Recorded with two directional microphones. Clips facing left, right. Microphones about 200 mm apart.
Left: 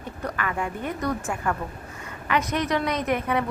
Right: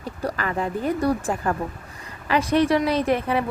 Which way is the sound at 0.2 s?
35° right (ahead or behind).